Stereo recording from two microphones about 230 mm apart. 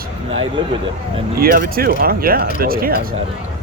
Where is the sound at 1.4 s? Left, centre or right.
Right.